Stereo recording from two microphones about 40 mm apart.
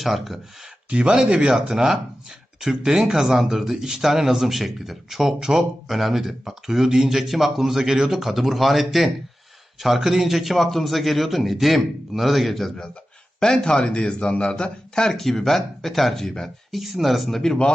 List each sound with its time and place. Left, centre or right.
0.0 s speech: centre
0.9 s a man's voice: right; by 12.7 s centre
13.4 s a man's voice: centre
15.1 s speech: centre